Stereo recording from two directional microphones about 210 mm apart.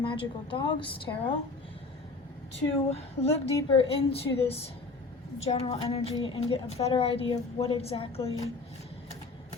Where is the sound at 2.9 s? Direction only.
30° left (ahead or behind).